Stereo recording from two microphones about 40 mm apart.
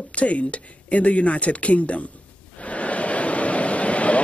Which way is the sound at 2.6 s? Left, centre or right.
Left.